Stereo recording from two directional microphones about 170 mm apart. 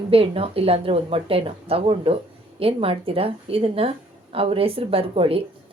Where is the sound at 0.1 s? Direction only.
35° right (ahead or behind).